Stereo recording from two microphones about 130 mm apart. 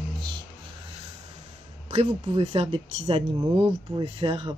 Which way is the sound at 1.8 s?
55° right (ahead or behind).